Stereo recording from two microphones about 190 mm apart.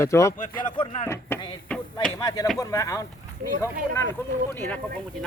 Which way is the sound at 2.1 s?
20° left (ahead or behind).